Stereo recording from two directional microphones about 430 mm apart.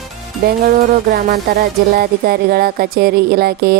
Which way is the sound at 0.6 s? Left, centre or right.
Centre.